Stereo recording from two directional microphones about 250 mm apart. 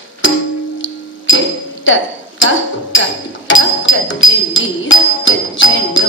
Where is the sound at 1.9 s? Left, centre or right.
Left.